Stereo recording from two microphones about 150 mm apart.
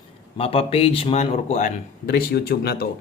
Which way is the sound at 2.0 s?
90° left.